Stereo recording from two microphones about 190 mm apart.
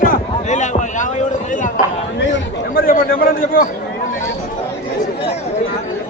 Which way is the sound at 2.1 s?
55° left (ahead or behind).